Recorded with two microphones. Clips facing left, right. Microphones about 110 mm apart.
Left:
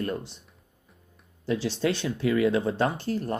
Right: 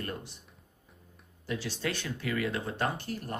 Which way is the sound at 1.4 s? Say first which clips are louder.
Left 8 dB; 25° left (ahead or behind).